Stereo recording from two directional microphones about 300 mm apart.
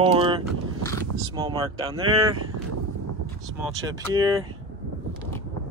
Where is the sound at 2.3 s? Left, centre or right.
Right.